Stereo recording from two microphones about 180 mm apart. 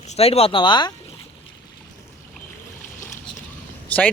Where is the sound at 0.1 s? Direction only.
35° left (ahead or behind).